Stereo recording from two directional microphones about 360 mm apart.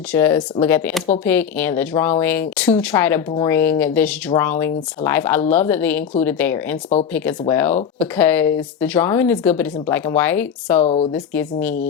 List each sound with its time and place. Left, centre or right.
0.1 s speech: centre
10.8 s speech: centre
11.1 s speech: centre